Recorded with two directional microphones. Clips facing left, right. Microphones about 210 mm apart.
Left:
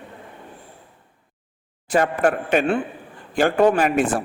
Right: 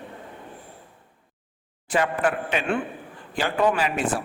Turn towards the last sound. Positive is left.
turn(degrees=50)  # may be behind; listen again after turning